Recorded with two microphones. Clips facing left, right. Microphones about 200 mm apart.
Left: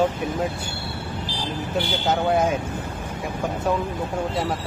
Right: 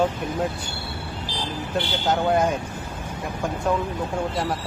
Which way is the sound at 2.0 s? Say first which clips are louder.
Even; 5° left (ahead or behind).